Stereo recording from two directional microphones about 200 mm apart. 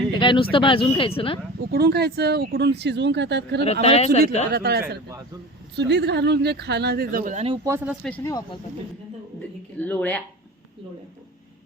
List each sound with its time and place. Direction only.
0.1 s a sound: 25° left (ahead or behind)
0.5 s speech: 25° left (ahead or behind)
1.5 s speech: 50° right (ahead or behind)
3.6 s speech: 30° left (ahead or behind)
4.5 s speech: 55° right (ahead or behind); by 7.6 s 30° right (ahead or behind)
7.6 s speech: 10° right (ahead or behind)
8.0 s speech: 5° left (ahead or behind)
9.7 s speech: 10° left (ahead or behind)